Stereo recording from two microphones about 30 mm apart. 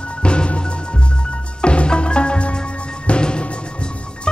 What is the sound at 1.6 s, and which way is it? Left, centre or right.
Music, left.